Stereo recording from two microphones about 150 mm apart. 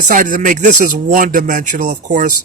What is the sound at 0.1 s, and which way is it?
Speech, 60° right (ahead or behind).